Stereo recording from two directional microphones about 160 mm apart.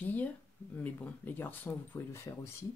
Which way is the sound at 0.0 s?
10° left (ahead or behind).